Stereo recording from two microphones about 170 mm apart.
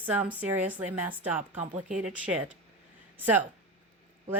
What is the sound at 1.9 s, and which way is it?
Speech, 5° right (ahead or behind).